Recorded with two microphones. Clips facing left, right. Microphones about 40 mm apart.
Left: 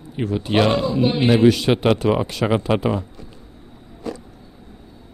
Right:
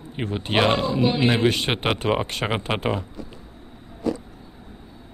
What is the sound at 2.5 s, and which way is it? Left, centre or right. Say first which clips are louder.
Speech: left 8 dB; right.